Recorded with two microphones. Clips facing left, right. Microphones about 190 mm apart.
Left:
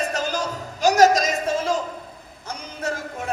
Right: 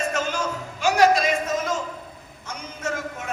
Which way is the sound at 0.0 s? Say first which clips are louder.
Even; 35° left (ahead or behind).